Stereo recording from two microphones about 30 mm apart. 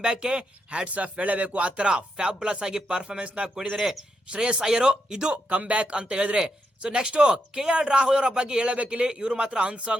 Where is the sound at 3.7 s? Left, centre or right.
Centre.